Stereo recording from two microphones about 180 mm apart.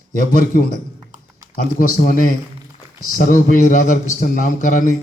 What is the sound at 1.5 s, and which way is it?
A man's voice, 50° left (ahead or behind).